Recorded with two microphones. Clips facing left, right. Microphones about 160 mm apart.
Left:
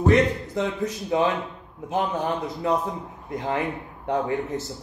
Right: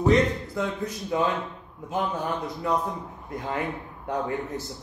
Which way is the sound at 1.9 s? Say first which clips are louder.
Left 3 dB; 25° left (ahead or behind).